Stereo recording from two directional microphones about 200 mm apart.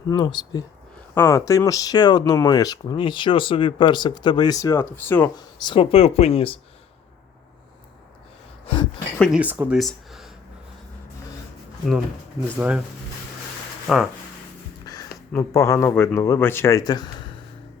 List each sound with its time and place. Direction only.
0.1 s speech: 20° left (ahead or behind)
5.4 s speech: 20° left (ahead or behind)
8.6 s a sound: 25° left (ahead or behind)
9.1 s speech: 5° left (ahead or behind)
9.4 s speech: 10° right (ahead or behind)
12.5 s speech: 5° right (ahead or behind)
13.8 s speech: centre (ahead or behind)
15.3 s speech: 15° left (ahead or behind)